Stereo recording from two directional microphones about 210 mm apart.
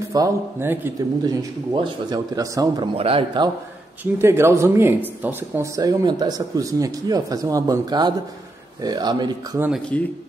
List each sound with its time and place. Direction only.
0.1 s speech: 15° right (ahead or behind)
4.0 s speech: 10° right (ahead or behind)
9.7 s speech: 5° left (ahead or behind)